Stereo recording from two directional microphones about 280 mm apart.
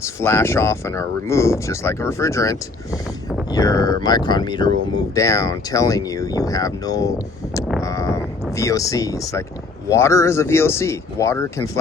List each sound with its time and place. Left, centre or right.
0.0 s speech: centre